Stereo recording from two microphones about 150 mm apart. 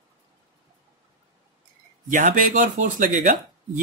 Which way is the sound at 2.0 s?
60° right (ahead or behind).